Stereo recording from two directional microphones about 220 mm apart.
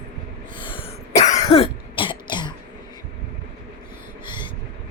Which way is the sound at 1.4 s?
25° left (ahead or behind).